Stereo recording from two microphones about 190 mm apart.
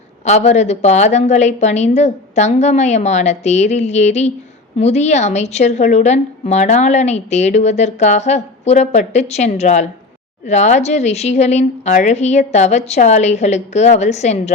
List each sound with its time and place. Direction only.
0.3 s a woman's voice: 35° left (ahead or behind)